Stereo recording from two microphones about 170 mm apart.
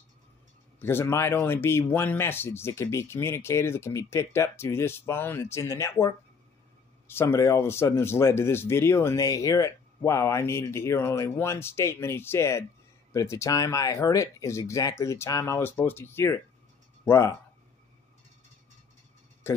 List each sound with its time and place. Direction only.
0.7 s speech: 15° left (ahead or behind)
19.4 s speech: 15° left (ahead or behind)